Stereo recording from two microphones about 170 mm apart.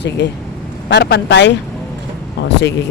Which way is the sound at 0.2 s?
90° left.